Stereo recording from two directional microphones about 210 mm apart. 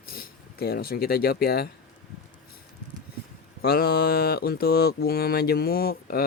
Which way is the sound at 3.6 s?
50° left (ahead or behind).